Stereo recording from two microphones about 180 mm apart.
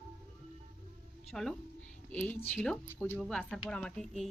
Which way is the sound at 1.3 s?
Centre (ahead or behind).